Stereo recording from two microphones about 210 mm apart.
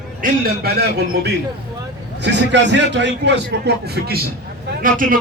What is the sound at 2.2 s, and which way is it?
A man's voice, 55° right (ahead or behind).